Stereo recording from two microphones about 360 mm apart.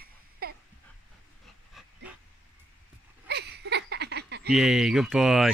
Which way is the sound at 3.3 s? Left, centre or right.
Right.